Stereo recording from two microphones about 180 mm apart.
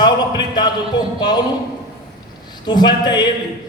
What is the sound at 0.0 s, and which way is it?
Speech, 25° left (ahead or behind).